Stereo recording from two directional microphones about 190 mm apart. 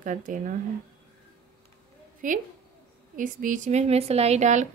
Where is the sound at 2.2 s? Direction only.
45° right (ahead or behind).